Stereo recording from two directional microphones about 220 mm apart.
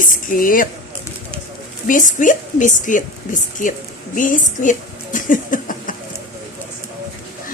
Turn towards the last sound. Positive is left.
turn(degrees=35)  # may be behind; listen again after turning